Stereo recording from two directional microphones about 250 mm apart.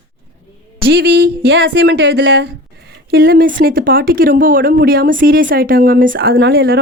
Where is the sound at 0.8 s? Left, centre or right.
Right.